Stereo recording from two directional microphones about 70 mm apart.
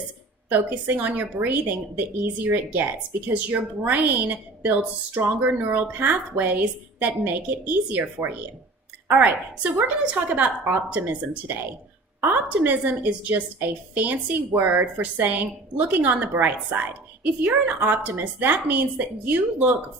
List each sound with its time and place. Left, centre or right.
0.5 s a woman's voice: right